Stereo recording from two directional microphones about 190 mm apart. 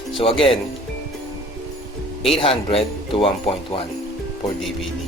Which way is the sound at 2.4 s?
30° left (ahead or behind).